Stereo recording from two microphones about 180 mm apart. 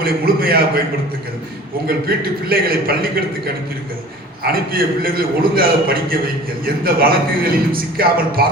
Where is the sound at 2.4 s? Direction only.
55° right (ahead or behind).